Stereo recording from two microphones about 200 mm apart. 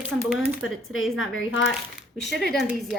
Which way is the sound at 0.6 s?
85° left.